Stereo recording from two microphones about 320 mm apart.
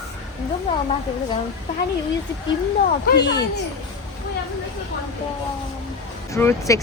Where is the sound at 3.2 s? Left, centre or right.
Left.